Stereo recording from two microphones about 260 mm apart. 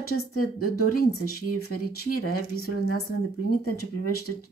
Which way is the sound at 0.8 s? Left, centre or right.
Left.